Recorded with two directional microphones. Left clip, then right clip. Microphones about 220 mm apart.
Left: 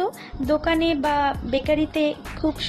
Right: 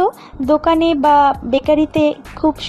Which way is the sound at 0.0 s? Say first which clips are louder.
Right 9 dB; 25° right (ahead or behind).